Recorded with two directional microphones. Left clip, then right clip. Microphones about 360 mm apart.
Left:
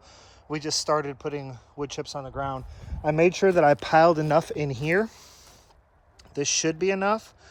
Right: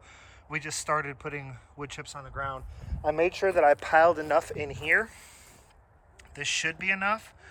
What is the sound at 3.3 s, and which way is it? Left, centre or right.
Speech, left.